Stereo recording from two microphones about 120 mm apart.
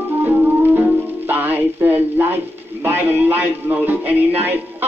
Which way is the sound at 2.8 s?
20° right (ahead or behind).